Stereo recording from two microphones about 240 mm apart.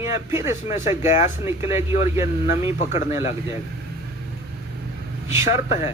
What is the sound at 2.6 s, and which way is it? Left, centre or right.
Speech, left.